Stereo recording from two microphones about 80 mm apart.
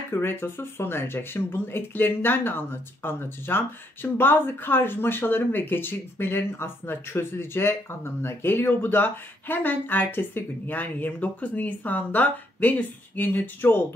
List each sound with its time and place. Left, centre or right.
0.1 s speech: left